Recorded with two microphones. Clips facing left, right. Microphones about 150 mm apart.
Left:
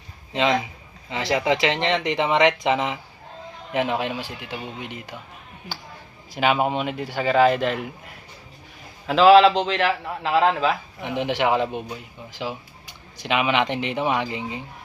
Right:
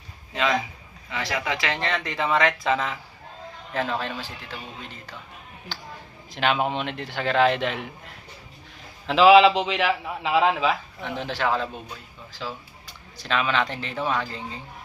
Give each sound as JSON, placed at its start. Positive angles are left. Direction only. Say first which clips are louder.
{"t": 0.3, "sound": "speech", "louder": "left 3 dB", "side_deg": 25}
{"t": 6.3, "sound": "a man's voice", "louder": "left 3 dB", "side_deg": 5}
{"t": 11.0, "sound": "speech", "louder": "left 5 dB", "side_deg": 15}